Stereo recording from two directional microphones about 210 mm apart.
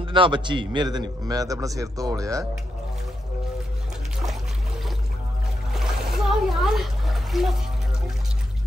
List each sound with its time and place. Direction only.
0.0 s a man's voice: 25° right (ahead or behind)
5.7 s splash: centre (ahead or behind)